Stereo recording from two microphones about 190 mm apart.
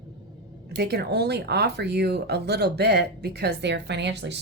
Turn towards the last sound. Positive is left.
turn(degrees=-65)  # may be behind; listen again after turning